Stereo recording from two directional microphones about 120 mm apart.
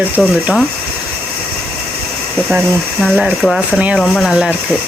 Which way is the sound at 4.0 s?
Centre (ahead or behind).